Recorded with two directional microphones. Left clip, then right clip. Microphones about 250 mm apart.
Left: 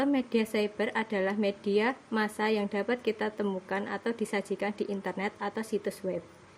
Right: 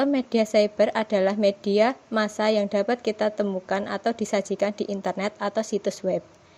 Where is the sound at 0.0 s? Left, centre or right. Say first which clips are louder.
Right 6 dB; right.